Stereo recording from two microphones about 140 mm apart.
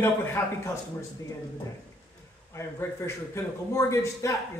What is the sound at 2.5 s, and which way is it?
A man's voice, 20° left (ahead or behind).